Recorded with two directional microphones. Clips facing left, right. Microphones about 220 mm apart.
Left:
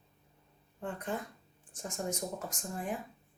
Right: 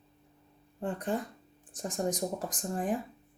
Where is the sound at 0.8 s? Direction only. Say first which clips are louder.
Right 5 dB; 35° right (ahead or behind).